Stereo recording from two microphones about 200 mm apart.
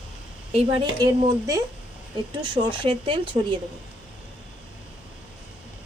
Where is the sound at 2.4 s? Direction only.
25° right (ahead or behind).